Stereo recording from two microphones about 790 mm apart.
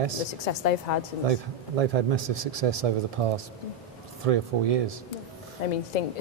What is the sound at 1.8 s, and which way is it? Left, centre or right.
Speech, right.